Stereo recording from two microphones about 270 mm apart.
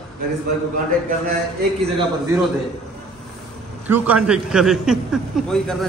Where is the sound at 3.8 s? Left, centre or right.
Centre.